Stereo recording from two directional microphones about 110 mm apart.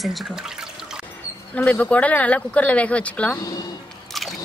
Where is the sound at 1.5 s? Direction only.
15° left (ahead or behind).